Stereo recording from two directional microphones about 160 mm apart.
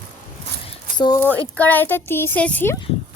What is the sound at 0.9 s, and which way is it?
Speech, 25° left (ahead or behind).